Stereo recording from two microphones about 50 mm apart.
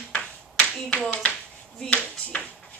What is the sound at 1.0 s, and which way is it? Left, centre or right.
Speech, left.